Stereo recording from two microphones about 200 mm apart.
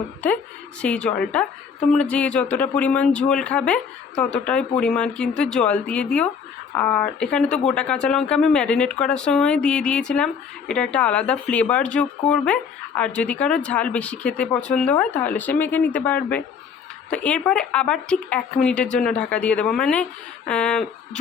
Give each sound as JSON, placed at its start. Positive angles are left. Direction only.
{"t": 0.8, "sound": "speech", "side_deg": 5}